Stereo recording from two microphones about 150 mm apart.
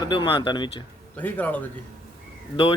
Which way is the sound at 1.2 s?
10° left (ahead or behind).